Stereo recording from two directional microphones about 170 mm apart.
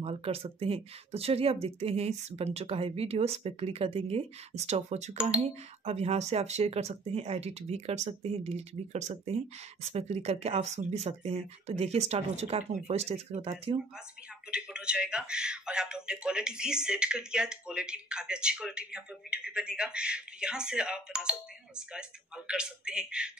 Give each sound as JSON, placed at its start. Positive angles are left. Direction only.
{"t": 0.0, "sound": "speech", "side_deg": -35}
{"t": 14.5, "sound": "speech", "side_deg": -5}